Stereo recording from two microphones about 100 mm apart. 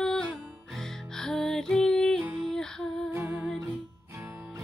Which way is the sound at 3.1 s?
20° right (ahead or behind).